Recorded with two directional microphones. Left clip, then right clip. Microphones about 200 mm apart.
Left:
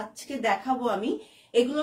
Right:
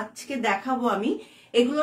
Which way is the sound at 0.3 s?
15° right (ahead or behind).